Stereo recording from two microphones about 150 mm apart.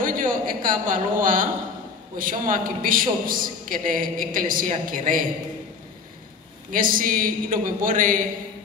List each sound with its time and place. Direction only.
0.0 s a sound: 65° right (ahead or behind)
2.1 s a man's voice: 65° right (ahead or behind)
6.7 s a man's voice: 65° right (ahead or behind)